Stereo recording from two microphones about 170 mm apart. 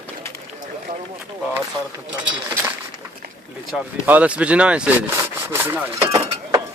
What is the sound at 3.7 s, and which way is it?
Speech, 10° right (ahead or behind).